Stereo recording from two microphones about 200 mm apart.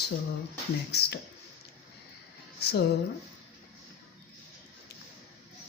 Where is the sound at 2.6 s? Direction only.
55° left (ahead or behind).